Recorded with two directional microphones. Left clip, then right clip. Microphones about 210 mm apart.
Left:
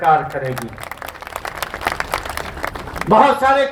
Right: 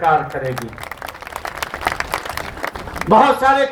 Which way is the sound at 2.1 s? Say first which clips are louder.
Even; 35° left (ahead or behind).